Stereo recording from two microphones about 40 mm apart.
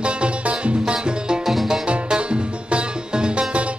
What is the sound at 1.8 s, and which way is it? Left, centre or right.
Music, right.